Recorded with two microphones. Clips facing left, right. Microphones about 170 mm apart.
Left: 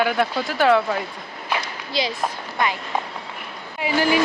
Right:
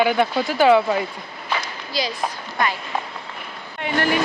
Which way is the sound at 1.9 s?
25° left (ahead or behind).